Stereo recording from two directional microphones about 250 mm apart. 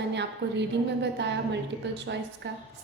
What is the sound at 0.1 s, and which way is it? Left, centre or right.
Speech, right.